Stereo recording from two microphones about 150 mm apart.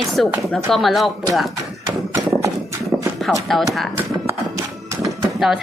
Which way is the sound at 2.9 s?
15° right (ahead or behind).